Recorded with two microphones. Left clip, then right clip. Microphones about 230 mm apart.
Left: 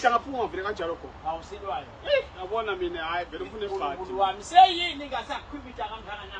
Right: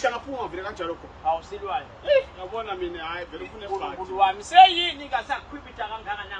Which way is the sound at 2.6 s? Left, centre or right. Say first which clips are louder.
Left 1 dB; centre.